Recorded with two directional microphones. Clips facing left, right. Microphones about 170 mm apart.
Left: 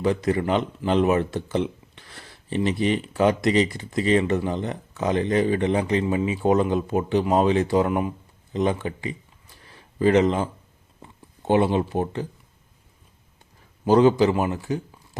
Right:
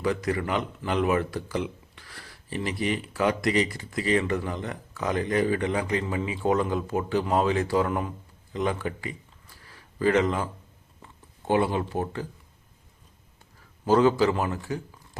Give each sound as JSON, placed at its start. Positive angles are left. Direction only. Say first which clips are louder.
{"t": 0.0, "sound": "speech", "louder": "left 4 dB", "side_deg": 25}
{"t": 9.6, "sound": "a sound", "louder": "left 5 dB", "side_deg": 20}
{"t": 11.4, "sound": "speech", "louder": "left 4 dB", "side_deg": 20}
{"t": 13.8, "sound": "a man's voice", "louder": "left 4 dB", "side_deg": 20}